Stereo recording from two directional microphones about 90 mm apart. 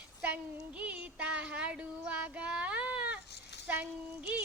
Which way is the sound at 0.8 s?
15° right (ahead or behind).